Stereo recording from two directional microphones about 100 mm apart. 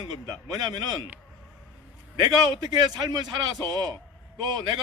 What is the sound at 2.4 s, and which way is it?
A man's voice, 45° right (ahead or behind).